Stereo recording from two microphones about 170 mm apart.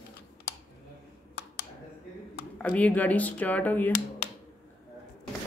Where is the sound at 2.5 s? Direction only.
10° left (ahead or behind).